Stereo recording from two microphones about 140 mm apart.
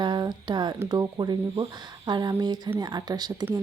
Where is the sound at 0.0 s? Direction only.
30° right (ahead or behind).